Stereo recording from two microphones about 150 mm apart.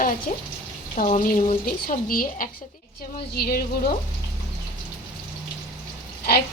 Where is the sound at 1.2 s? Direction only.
60° left (ahead or behind).